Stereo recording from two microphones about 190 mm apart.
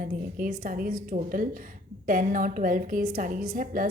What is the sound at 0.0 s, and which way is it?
A woman's voice, 45° right (ahead or behind).